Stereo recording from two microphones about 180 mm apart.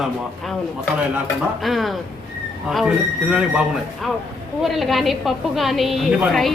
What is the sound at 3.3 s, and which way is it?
A woman's voice, 5° right (ahead or behind).